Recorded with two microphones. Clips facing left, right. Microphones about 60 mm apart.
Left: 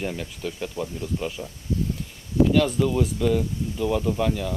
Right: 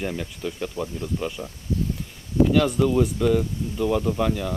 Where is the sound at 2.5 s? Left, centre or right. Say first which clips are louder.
Right 1 dB; centre.